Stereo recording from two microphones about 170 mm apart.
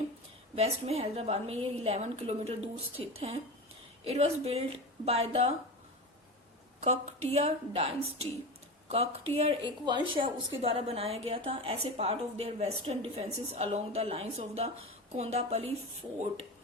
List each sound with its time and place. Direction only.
0.5 s a woman's voice: 35° right (ahead or behind)
6.8 s a woman's voice: 40° right (ahead or behind)